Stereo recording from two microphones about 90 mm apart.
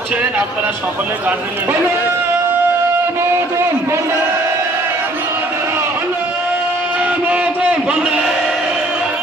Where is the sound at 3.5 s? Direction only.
30° right (ahead or behind).